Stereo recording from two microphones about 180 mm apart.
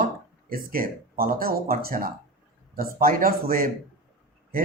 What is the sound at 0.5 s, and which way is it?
Speech, 55° right (ahead or behind).